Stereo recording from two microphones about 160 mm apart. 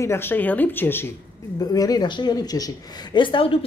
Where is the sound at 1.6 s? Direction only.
25° left (ahead or behind).